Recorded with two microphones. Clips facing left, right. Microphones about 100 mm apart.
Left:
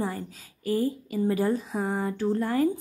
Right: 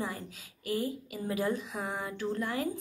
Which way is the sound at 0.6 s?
35° left (ahead or behind).